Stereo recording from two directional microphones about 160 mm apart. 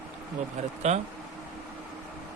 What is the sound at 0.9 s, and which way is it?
Speech, 45° right (ahead or behind).